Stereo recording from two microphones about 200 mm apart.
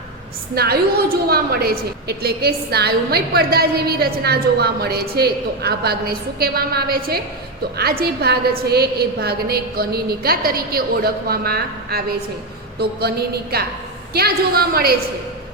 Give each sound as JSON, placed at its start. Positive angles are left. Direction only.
{"t": 0.5, "sound": "a woman's voice", "side_deg": -50}